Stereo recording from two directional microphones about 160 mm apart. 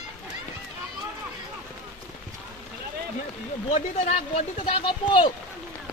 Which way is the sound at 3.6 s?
45° left (ahead or behind).